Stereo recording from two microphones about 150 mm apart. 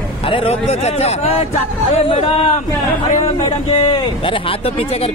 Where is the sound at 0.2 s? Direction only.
35° left (ahead or behind).